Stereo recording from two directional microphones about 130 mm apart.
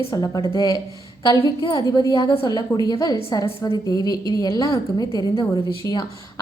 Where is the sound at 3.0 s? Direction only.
30° left (ahead or behind).